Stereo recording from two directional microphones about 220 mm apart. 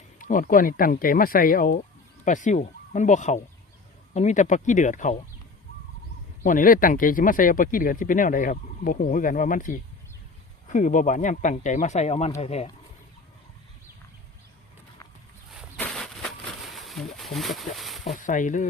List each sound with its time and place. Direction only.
0.2 s speech: 35° left (ahead or behind)
6.4 s speech: 40° left (ahead or behind)
15.4 s a sound: 5° left (ahead or behind)
18.0 s speech: 35° left (ahead or behind)